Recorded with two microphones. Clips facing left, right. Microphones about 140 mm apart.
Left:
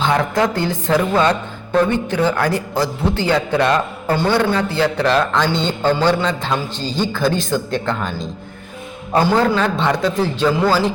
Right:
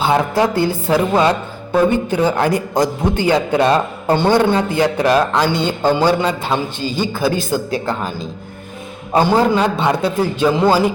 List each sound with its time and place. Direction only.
0.0 s a man's voice: 20° right (ahead or behind)